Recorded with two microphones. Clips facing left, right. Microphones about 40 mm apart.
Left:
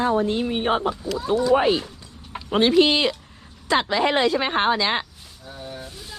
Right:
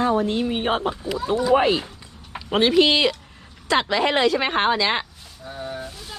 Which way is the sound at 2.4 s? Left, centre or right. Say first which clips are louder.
Even; right.